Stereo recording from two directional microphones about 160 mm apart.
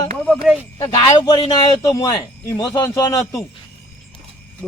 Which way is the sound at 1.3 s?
25° left (ahead or behind).